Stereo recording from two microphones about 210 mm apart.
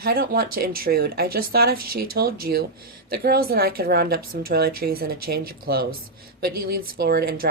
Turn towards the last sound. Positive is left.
turn(degrees=-45)  # may be behind; listen again after turning